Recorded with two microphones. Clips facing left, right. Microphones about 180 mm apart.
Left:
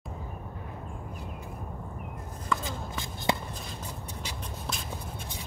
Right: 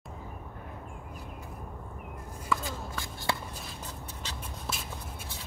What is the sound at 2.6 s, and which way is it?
Shuffle, 20° left (ahead or behind).